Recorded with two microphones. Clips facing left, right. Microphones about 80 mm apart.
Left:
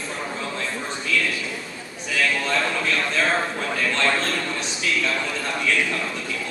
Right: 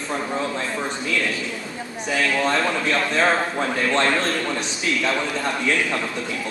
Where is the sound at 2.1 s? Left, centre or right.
Right.